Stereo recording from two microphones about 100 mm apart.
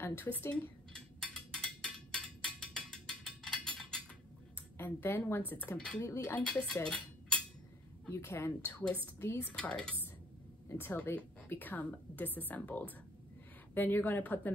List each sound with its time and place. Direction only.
0.0 s a woman's voice: 20° left (ahead or behind)
0.9 s a sound: 10° left (ahead or behind)
4.7 s a woman's voice: 20° left (ahead or behind)
8.1 s a woman's voice: 25° left (ahead or behind)
9.5 s speech: 10° left (ahead or behind)
10.7 s a woman's voice: 20° left (ahead or behind)